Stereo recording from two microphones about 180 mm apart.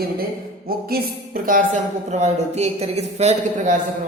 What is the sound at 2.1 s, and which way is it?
Speech, 35° right (ahead or behind).